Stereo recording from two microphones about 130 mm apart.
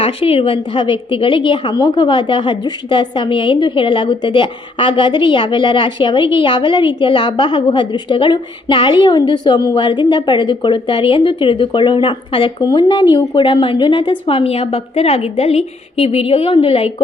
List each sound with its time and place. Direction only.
0.0 s a woman's voice: 45° left (ahead or behind)